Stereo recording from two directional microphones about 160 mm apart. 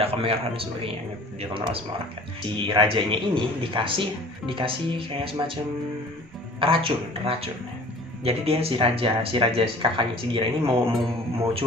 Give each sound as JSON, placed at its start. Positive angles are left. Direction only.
{"t": 0.0, "sound": "speech", "side_deg": -35}
{"t": 6.6, "sound": "speech", "side_deg": -35}